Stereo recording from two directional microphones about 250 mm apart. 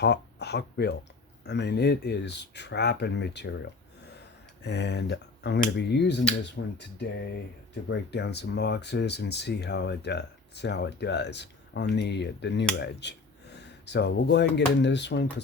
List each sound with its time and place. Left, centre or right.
0.0 s speech: left
4.6 s speech: left